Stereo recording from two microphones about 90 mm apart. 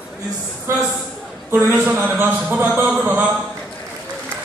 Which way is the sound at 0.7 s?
30° right (ahead or behind).